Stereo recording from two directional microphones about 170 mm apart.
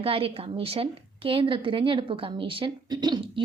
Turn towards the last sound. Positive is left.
turn(degrees=-25)  # may be behind; listen again after turning